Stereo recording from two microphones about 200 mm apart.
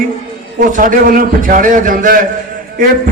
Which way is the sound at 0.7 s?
40° right (ahead or behind).